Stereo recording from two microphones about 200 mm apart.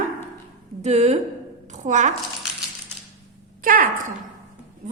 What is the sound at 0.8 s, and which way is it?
A woman's voice, 35° right (ahead or behind).